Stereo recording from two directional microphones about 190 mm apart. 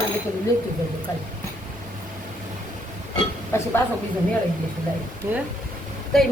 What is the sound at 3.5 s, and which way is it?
Speech, 15° left (ahead or behind).